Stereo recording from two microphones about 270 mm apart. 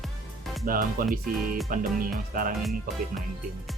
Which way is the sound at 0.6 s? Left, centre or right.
Right.